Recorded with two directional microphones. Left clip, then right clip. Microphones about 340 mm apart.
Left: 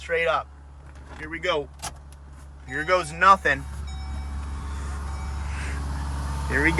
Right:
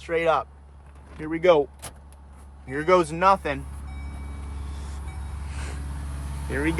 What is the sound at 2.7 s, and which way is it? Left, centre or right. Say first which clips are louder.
Speech: right 3 dB; centre.